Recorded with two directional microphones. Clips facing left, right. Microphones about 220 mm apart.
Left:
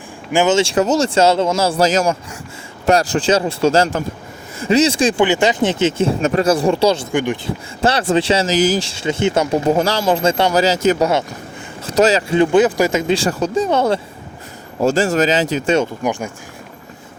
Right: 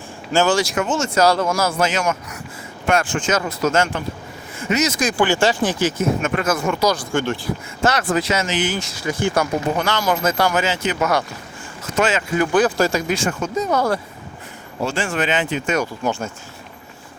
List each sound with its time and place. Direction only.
0.3 s speech: 20° left (ahead or behind)
5.2 s speech: 20° left (ahead or behind)
7.9 s speech: 30° left (ahead or behind)
14.8 s speech: 40° left (ahead or behind)
16.0 s speech: 15° left (ahead or behind)